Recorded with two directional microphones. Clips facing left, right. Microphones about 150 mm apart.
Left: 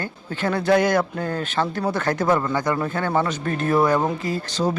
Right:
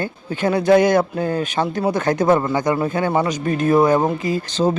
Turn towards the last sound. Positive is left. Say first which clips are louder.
# right 4 dB
turn(degrees=-20)  # may be behind; listen again after turning